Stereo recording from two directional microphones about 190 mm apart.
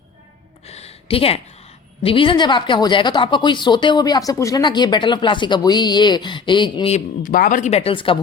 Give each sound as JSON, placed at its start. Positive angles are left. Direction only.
{"t": 0.7, "sound": "a sound", "side_deg": 35}
{"t": 2.0, "sound": "speech", "side_deg": 25}
{"t": 6.9, "sound": "speech", "side_deg": 45}